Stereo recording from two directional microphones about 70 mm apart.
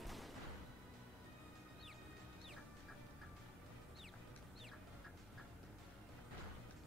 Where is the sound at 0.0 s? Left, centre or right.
Centre.